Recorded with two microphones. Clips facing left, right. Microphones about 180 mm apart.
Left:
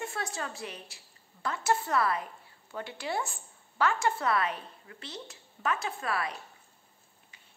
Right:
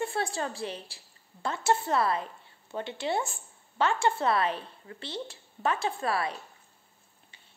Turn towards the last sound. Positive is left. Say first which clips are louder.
# right 4 dB
turn(degrees=-30)  # may be behind; listen again after turning